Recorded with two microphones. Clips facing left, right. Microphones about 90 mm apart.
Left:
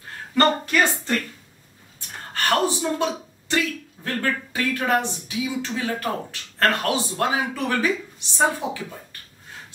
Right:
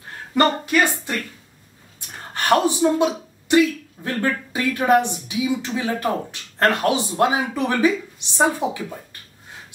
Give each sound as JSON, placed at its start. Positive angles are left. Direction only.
{"t": 0.3, "sound": "a woman's voice", "side_deg": -15}